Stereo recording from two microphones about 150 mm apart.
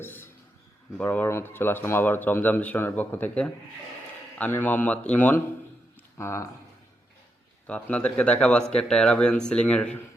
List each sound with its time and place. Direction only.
0.0 s a sound: 15° left (ahead or behind)
0.9 s speech: 10° left (ahead or behind)
7.7 s speech: 10° left (ahead or behind)